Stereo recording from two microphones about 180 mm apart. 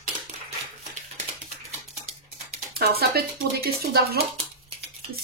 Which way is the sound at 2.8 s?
60° right (ahead or behind).